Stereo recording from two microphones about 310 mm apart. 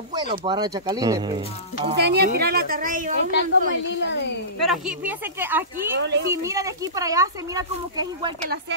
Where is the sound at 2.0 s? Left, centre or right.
Right.